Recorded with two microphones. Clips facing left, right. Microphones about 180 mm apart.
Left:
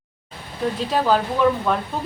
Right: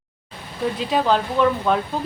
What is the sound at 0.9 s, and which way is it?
Speech, centre (ahead or behind).